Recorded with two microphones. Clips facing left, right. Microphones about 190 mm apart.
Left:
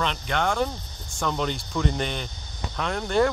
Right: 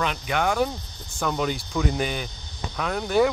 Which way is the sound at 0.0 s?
5° right (ahead or behind).